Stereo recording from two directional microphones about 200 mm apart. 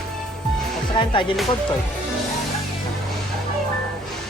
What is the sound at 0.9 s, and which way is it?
Music, 25° left (ahead or behind).